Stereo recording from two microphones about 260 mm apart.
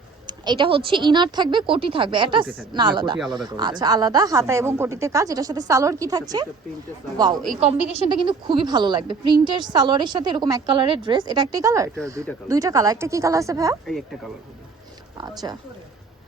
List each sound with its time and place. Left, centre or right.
0.3 s a woman's voice: centre
3.2 s speech: centre
3.4 s a woman's voice: centre
7.5 s a woman's voice: right
13.8 s speech: centre
15.2 s a woman's voice: centre